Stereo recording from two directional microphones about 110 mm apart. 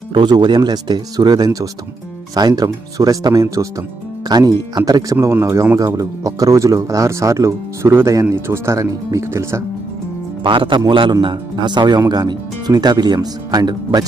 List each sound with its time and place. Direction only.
0.1 s a man's voice: 45° right (ahead or behind)
5.1 s speech: 25° right (ahead or behind)
10.4 s a man's voice: 45° right (ahead or behind)